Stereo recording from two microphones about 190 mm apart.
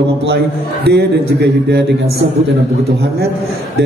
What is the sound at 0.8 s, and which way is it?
A man's voice, 60° right (ahead or behind).